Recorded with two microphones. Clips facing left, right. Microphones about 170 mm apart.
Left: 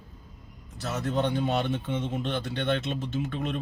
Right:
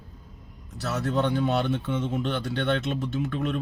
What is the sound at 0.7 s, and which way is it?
Speech, 15° left (ahead or behind).